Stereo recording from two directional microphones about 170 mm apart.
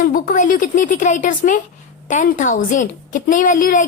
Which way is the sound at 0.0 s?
55° left (ahead or behind).